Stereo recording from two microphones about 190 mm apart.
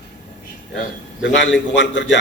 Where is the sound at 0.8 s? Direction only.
70° left (ahead or behind).